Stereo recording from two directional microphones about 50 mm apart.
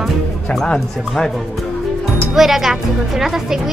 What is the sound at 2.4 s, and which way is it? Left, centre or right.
Speech, centre.